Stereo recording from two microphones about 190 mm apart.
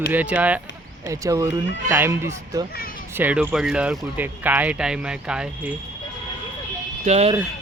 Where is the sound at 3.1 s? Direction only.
10° right (ahead or behind).